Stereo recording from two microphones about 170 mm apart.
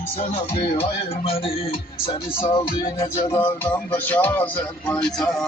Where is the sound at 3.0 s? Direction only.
20° left (ahead or behind).